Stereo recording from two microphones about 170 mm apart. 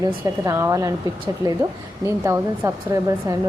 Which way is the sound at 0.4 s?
15° right (ahead or behind).